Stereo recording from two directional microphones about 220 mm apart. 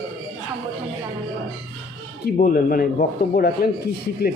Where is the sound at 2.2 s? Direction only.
45° left (ahead or behind).